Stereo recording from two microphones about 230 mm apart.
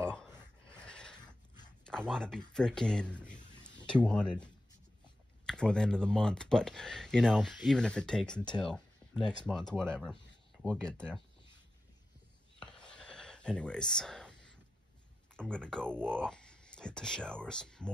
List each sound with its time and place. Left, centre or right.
0.0 s a sound: centre
1.1 s dog: centre
1.9 s speech: centre
5.5 s speech: centre
12.5 s a sound: centre
15.3 s speech: centre